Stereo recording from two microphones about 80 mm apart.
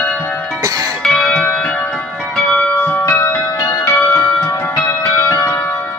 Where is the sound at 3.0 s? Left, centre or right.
Left.